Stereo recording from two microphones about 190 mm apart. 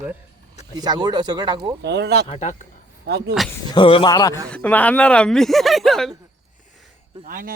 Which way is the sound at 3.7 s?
25° left (ahead or behind).